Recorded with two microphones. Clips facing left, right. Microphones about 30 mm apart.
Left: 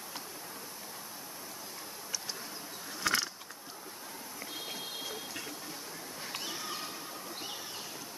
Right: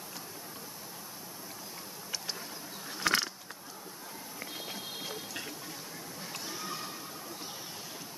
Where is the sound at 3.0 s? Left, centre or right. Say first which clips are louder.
Right 2 dB; right.